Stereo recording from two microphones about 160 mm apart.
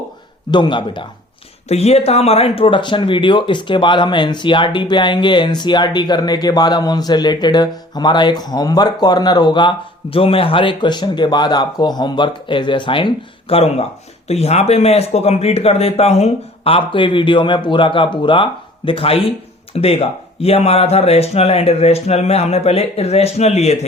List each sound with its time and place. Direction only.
0.5 s speech: 30° left (ahead or behind)
1.6 s speech: 40° left (ahead or behind)